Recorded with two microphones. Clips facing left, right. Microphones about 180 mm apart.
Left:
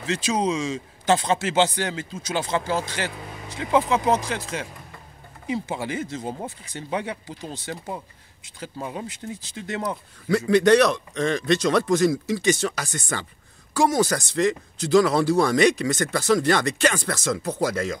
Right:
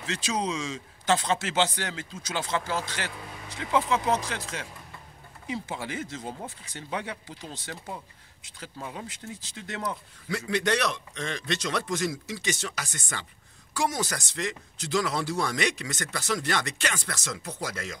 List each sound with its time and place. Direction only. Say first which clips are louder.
0.0 s speech: left 6 dB; 15° left (ahead or behind)
7.7 s speech: left 6 dB; 30° left (ahead or behind)
8.8 s speech: left 6 dB; 10° left (ahead or behind)
10.2 s speech: left 10 dB; 40° left (ahead or behind)